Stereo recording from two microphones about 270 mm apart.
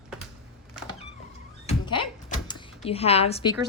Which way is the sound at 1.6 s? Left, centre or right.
Centre.